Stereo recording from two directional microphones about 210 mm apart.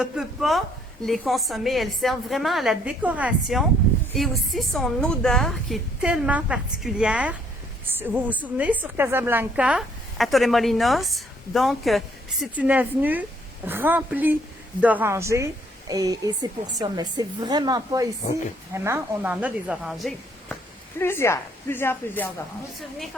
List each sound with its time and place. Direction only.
0.0 s a woman's voice: centre (ahead or behind)
21.0 s a woman's voice: 10° left (ahead or behind)